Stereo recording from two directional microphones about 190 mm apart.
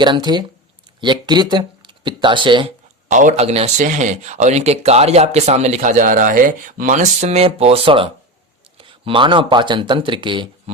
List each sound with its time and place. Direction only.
0.0 s speech: 25° right (ahead or behind)
3.1 s speech: 40° right (ahead or behind); by 10.5 s 25° right (ahead or behind)